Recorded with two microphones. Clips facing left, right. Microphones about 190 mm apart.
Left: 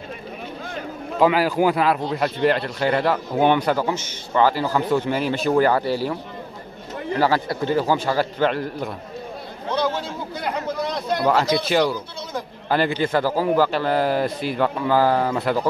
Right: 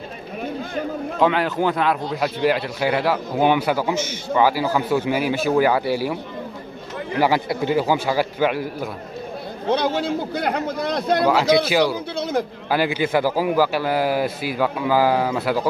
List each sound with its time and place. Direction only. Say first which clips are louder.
1.2 s speech: left 2 dB; 5° left (ahead or behind); by 6.1 s 10° right (ahead or behind)
7.2 s speech: right 1 dB; 15° right (ahead or behind)
9.7 s a man's voice: right 3 dB; 70° right (ahead or behind)
11.6 s speech: right 1 dB; 5° right (ahead or behind)
12.2 s a man's voice: right 8 dB; 70° right (ahead or behind)
12.6 s speech: left 4 dB; 5° right (ahead or behind)